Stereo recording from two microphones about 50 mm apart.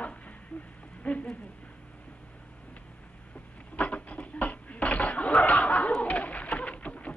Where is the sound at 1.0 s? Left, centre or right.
Left.